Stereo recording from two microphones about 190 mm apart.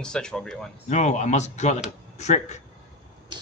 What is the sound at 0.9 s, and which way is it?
Speech, 35° left (ahead or behind).